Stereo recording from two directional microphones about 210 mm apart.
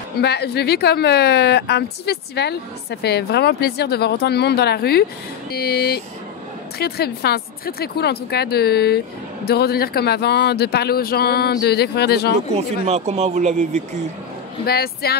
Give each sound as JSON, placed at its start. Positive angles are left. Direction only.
{"t": 0.2, "sound": "a woman's voice", "side_deg": 50}
{"t": 12.5, "sound": "speech", "side_deg": -30}
{"t": 14.7, "sound": "a woman's voice", "side_deg": 50}